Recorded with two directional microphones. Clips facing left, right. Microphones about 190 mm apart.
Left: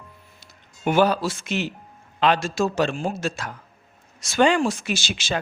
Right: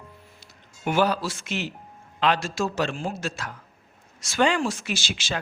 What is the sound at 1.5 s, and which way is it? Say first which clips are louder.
Speech: left 4 dB; 55° left (ahead or behind).